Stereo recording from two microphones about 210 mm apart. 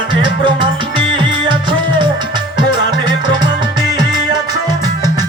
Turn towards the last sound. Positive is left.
turn(degrees=-20)  # may be behind; listen again after turning